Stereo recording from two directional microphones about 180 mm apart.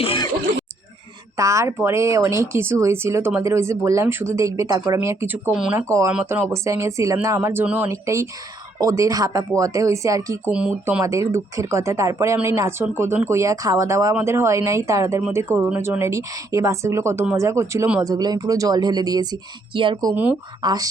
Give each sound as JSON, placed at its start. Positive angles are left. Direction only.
{"t": 0.0, "sound": "throat clearing", "side_deg": 30}
{"t": 1.4, "sound": "speech", "side_deg": -15}